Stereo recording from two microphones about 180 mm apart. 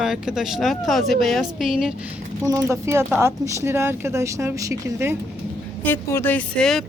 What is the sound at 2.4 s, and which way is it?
Speech, 15° right (ahead or behind).